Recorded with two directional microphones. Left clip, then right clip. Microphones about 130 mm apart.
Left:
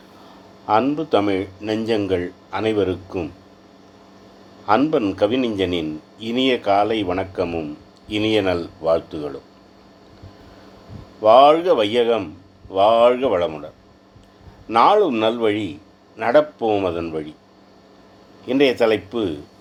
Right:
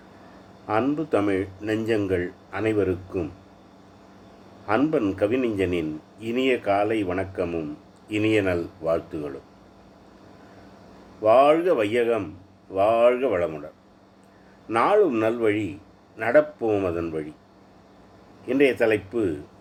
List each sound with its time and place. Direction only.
0.7 s a man's voice: 15° left (ahead or behind)
1.3 s a man's voice: 30° left (ahead or behind)
4.6 s a man's voice: 25° left (ahead or behind)
5.2 s speech: 40° left (ahead or behind)
6.5 s a man's voice: 25° left (ahead or behind)
8.1 s speech: 40° left (ahead or behind)
8.4 s a man's voice: 20° left (ahead or behind)
11.2 s a man's voice: 20° left (ahead or behind)
13.1 s speech: 40° left (ahead or behind)
13.4 s a man's voice: 20° left (ahead or behind)
14.7 s a man's voice: 20° left (ahead or behind)
15.4 s a man's voice: 30° left (ahead or behind)
18.6 s a man's voice: 25° left (ahead or behind)